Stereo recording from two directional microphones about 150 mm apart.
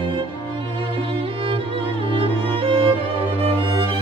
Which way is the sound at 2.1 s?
35° right (ahead or behind).